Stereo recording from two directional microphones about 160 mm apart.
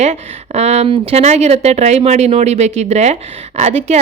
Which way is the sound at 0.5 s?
40° right (ahead or behind).